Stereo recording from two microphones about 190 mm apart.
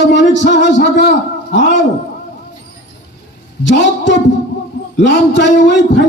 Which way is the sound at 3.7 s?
70° left (ahead or behind).